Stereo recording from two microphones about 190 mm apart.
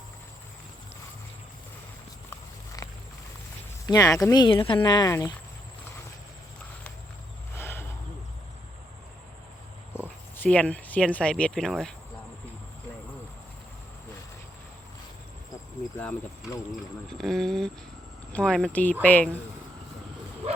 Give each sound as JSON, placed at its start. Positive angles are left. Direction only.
{"t": 2.3, "sound": "walk", "side_deg": 15}
{"t": 3.8, "sound": "speech", "side_deg": 20}
{"t": 7.6, "sound": "a sound", "side_deg": 10}
{"t": 9.9, "sound": "speech", "side_deg": 10}
{"t": 16.0, "sound": "speech", "side_deg": 5}